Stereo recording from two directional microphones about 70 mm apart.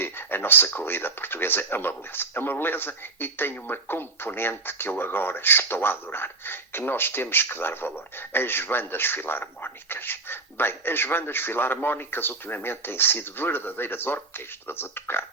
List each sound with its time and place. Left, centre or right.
0.0 s speech: left